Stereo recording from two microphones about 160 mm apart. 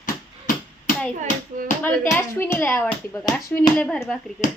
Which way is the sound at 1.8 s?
15° left (ahead or behind).